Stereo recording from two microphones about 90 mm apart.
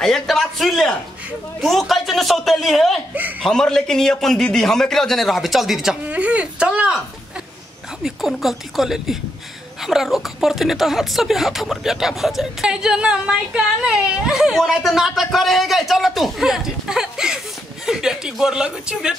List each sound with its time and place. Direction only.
0.0 s speech: 5° left (ahead or behind)
3.2 s speech: 15° right (ahead or behind)
3.4 s speech: 5° left (ahead or behind)
6.0 s speech: 15° right (ahead or behind)
8.0 s speech: centre (ahead or behind)